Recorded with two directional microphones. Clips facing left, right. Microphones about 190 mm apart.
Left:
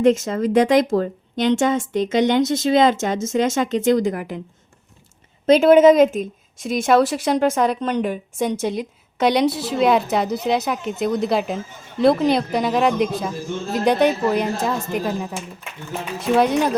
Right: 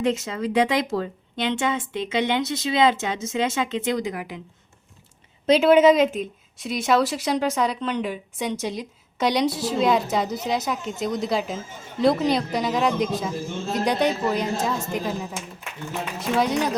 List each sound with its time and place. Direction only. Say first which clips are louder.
0.0 s speech: left 7 dB; 50° left (ahead or behind)
5.5 s a woman's voice: left 4 dB; 50° left (ahead or behind)